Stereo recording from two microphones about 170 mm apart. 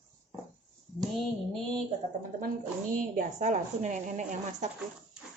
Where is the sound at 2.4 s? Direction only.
55° right (ahead or behind).